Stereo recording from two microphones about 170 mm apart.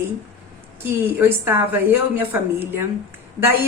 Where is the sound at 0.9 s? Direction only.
15° right (ahead or behind).